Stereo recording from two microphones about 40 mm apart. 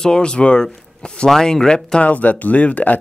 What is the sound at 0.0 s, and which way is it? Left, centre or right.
Speech, left.